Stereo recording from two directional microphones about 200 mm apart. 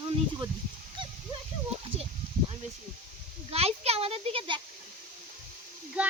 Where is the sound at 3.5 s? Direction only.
30° right (ahead or behind).